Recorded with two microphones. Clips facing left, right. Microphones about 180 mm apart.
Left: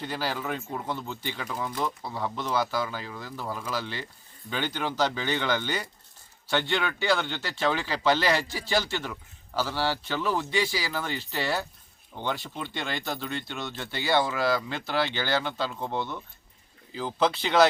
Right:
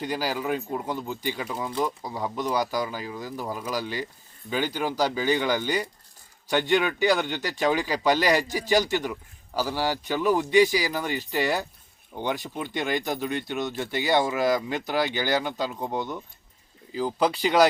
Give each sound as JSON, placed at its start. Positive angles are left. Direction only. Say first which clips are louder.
{"t": 0.0, "sound": "speech", "louder": "right 3 dB", "side_deg": -10}